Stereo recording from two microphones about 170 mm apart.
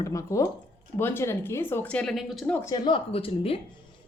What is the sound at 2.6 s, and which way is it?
Speech, 25° left (ahead or behind).